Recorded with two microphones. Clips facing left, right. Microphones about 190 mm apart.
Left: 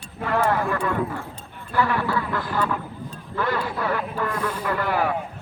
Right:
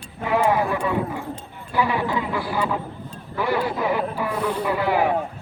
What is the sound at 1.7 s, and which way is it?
Quack, 15° right (ahead or behind).